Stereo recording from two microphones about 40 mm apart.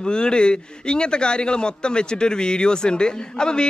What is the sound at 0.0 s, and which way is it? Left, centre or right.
Speech, left.